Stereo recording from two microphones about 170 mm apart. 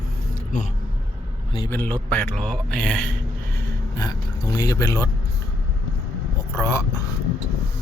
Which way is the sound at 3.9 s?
20° left (ahead or behind).